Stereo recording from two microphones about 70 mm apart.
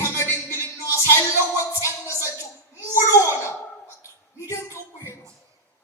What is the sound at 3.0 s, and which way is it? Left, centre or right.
Speech, left.